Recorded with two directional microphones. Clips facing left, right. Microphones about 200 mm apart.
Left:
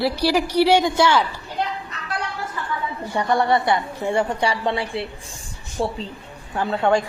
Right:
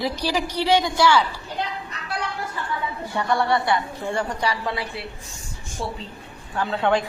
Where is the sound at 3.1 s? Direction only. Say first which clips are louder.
Left 3 dB; 20° left (ahead or behind).